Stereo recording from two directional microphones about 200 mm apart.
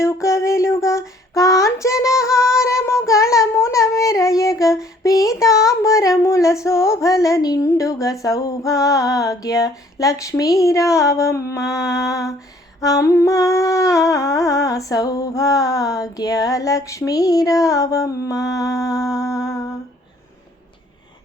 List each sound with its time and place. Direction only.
0.0 s female singing: 15° left (ahead or behind)
2.6 s child singing: 15° left (ahead or behind)
11.9 s humming: 15° left (ahead or behind)